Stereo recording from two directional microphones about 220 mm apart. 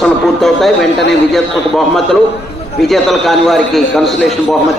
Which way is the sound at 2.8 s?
Centre (ahead or behind).